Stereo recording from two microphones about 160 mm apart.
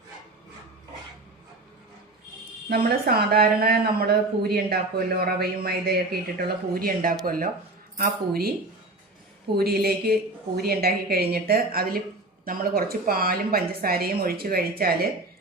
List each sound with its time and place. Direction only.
2.6 s speech: 70° right (ahead or behind)
6.7 s speech: 65° right (ahead or behind)
9.6 s speech: 80° right